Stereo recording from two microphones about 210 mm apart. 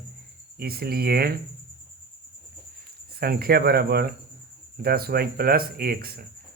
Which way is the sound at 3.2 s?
45° right (ahead or behind).